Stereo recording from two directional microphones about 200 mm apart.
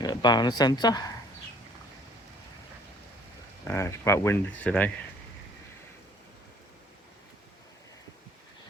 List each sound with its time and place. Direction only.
0.0 s speech: 20° left (ahead or behind)
3.6 s speech: 10° left (ahead or behind)